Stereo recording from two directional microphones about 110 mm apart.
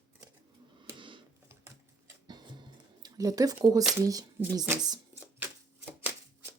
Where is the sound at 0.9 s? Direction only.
45° right (ahead or behind).